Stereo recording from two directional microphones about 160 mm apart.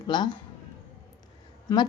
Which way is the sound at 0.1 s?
30° left (ahead or behind).